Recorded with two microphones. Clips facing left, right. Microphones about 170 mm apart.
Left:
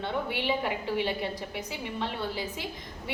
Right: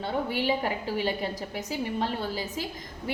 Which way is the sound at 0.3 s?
40° right (ahead or behind).